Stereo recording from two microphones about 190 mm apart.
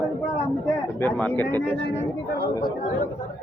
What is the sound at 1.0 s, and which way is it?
Speech, 10° left (ahead or behind).